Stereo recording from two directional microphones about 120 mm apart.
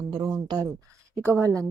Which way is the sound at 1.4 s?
25° right (ahead or behind).